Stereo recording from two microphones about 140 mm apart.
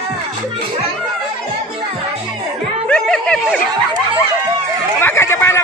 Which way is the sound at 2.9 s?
5° left (ahead or behind).